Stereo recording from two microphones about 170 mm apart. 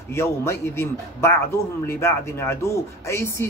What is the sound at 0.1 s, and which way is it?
Speech, 15° left (ahead or behind).